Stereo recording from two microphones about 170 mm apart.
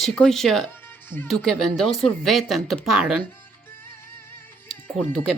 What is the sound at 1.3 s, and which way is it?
Speech, centre (ahead or behind).